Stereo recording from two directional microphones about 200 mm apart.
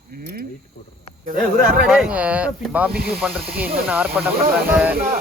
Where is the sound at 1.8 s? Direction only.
5° right (ahead or behind).